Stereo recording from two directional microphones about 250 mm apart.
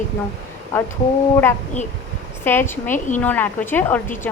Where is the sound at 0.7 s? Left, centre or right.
Centre.